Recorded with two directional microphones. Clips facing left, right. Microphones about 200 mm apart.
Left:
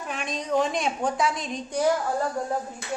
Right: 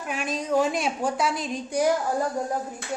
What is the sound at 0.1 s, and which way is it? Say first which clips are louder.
A woman's voice: right 2 dB; 5° right (ahead or behind).